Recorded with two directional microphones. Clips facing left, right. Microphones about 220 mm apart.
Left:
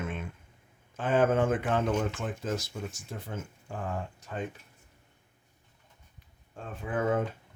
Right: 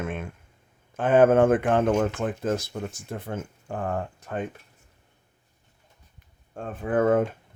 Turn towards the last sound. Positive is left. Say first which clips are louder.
# right 7 dB
turn(degrees=-55)  # may be behind; listen again after turning